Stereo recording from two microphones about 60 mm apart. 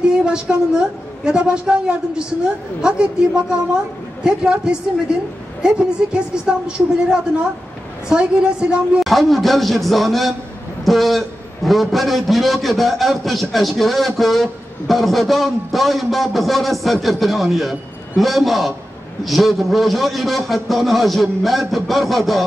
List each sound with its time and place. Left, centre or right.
0.0 s a woman's voice: centre
8.1 s a woman's voice: centre
9.0 s a man's voice: centre